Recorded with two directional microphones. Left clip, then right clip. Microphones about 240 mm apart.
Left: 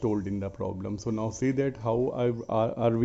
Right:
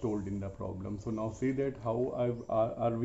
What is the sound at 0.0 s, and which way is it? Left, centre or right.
Speech, left.